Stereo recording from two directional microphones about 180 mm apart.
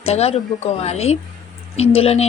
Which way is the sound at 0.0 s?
35° left (ahead or behind).